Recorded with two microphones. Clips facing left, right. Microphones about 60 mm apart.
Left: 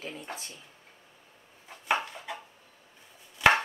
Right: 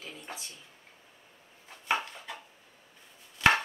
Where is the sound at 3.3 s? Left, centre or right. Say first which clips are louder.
Left 2 dB; centre.